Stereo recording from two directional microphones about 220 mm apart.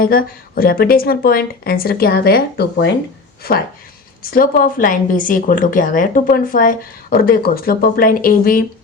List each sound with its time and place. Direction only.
0.0 s a woman's voice: 40° left (ahead or behind)